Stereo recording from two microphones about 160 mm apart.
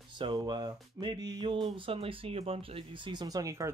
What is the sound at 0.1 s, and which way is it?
Speech, 25° right (ahead or behind).